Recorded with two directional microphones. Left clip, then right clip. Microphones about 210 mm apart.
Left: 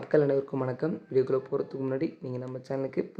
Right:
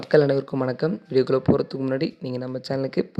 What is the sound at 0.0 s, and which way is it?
Speech, 30° right (ahead or behind).